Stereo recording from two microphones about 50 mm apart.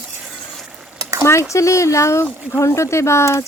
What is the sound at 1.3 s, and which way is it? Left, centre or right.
Speech, left.